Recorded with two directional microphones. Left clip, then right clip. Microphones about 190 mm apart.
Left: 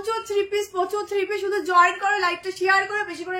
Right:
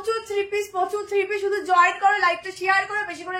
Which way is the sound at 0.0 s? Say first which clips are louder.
Left 1 dB; 20° left (ahead or behind).